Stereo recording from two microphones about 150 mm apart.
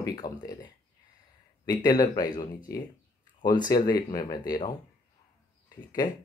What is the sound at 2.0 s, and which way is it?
Speech, 25° left (ahead or behind).